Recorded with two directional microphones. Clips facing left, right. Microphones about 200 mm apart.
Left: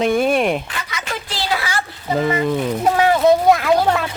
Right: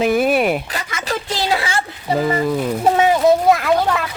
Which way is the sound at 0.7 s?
45° right (ahead or behind).